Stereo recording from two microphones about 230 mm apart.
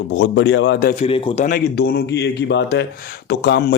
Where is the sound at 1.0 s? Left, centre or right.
Left.